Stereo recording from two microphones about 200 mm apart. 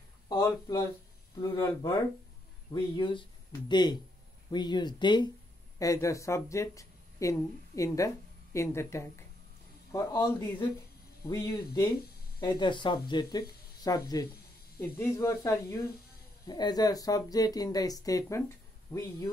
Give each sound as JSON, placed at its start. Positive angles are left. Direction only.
{"t": 0.3, "sound": "speech", "side_deg": 15}
{"t": 2.7, "sound": "speech", "side_deg": 25}